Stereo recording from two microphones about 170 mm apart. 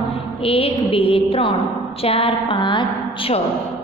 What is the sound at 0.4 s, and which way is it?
A woman's voice, 35° left (ahead or behind).